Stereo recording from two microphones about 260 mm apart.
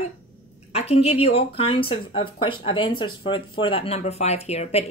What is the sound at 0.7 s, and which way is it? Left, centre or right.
Speech, left.